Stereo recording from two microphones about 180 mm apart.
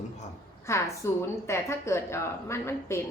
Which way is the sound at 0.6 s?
15° left (ahead or behind).